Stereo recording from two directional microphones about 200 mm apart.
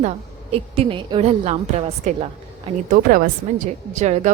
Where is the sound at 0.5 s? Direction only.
30° right (ahead or behind).